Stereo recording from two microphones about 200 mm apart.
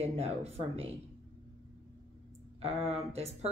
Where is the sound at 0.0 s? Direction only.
30° right (ahead or behind).